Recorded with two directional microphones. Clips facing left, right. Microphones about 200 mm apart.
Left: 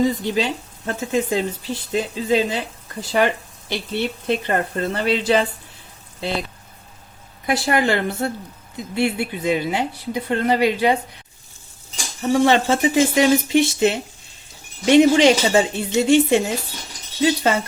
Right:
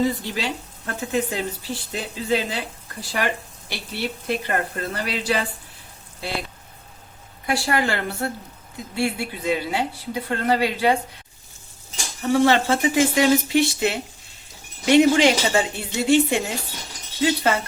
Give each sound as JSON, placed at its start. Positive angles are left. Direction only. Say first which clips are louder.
{"t": 0.0, "sound": "speech", "louder": "left 4 dB", "side_deg": 20}
{"t": 7.4, "sound": "speech", "louder": "left 3 dB", "side_deg": 20}
{"t": 12.3, "sound": "speech", "louder": "left 2 dB", "side_deg": 20}